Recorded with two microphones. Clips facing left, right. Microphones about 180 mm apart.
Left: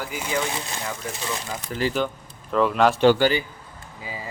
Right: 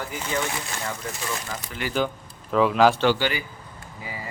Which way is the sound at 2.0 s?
Centre (ahead or behind).